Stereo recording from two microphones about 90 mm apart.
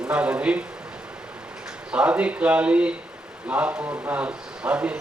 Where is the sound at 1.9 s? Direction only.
15° right (ahead or behind).